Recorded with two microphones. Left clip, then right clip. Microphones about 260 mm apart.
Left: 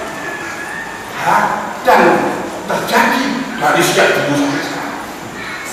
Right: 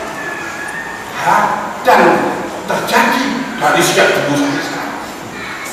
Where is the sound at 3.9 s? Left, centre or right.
Centre.